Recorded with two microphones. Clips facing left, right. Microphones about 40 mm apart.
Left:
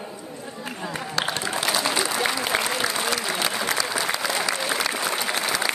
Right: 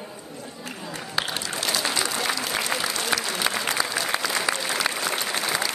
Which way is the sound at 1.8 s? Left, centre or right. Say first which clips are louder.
Left 2 dB; centre.